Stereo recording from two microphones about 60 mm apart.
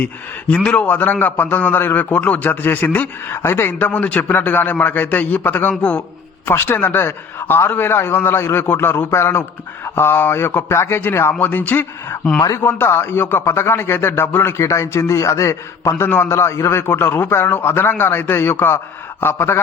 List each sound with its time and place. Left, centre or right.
0.0 s a man's voice: left
11.3 s a man's voice: left
14.6 s speech: left
15.2 s a man's voice: left
16.0 s a man's voice: left
16.3 s a man's voice: left